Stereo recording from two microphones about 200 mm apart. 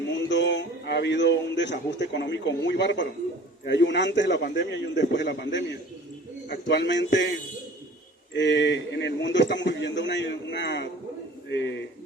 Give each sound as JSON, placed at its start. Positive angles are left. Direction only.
{"t": 0.1, "sound": "a man's voice", "side_deg": 60}